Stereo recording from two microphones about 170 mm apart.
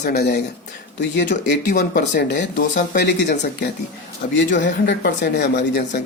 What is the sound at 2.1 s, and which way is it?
Speech, 85° left.